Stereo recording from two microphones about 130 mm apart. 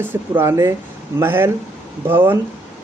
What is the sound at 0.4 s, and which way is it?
Speech, 20° right (ahead or behind).